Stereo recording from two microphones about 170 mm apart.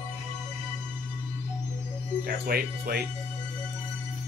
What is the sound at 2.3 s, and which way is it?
Speech, 60° right (ahead or behind).